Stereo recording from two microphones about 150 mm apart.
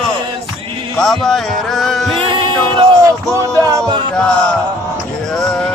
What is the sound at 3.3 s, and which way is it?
Music, 20° right (ahead or behind).